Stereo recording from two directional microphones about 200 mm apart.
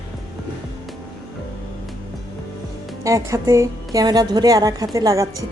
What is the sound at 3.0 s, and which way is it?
A woman's voice, 15° right (ahead or behind).